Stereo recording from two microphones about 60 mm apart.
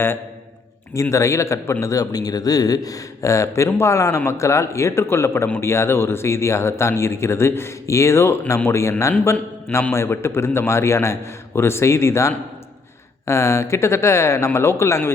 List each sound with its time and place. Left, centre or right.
1.1 s a man's voice: left
1.8 s a man's voice: left